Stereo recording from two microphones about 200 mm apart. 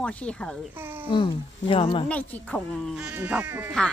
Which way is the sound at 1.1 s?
25° left (ahead or behind).